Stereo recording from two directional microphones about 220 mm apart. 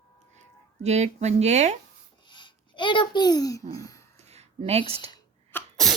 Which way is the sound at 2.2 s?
20° left (ahead or behind).